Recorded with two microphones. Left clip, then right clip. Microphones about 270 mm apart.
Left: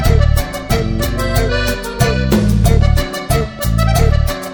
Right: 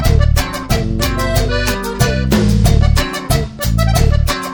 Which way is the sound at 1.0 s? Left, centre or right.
Centre.